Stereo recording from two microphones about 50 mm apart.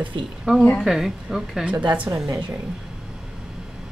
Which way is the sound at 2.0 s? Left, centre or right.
Right.